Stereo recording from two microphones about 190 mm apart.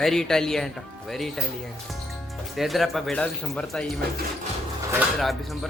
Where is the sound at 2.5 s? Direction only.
Centre (ahead or behind).